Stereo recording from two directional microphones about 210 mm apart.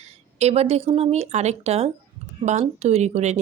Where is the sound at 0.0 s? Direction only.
30° right (ahead or behind).